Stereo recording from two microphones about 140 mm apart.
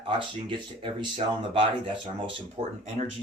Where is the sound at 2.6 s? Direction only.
45° right (ahead or behind).